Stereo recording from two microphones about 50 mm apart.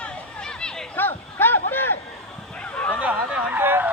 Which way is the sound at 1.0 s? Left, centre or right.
Left.